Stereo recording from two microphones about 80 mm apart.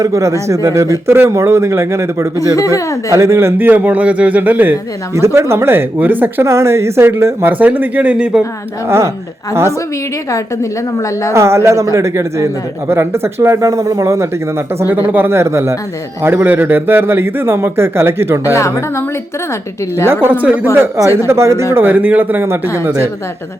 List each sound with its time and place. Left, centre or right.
0.0 s speech: right
2.6 s a woman's voice: left
3.1 s a man's voice: right
5.1 s a man's voice: right
6.4 s speech: right
7.6 s a man's voice: right
10.3 s a woman's voice: left
11.3 s speech: right
14.8 s a man's voice: right
18.5 s a woman's voice: left
20.2 s a man's voice: right
20.7 s speech: right